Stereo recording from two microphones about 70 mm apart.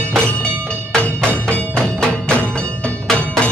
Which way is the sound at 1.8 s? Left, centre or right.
Centre.